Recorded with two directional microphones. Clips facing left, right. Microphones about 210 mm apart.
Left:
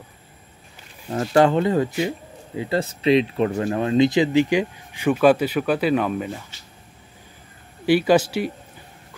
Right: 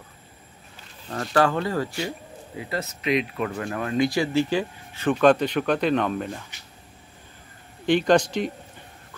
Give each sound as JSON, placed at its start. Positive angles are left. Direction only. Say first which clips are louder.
{"t": 1.2, "sound": "speech", "louder": "left 5 dB", "side_deg": 25}
{"t": 7.8, "sound": "speech", "louder": "left 2 dB", "side_deg": 5}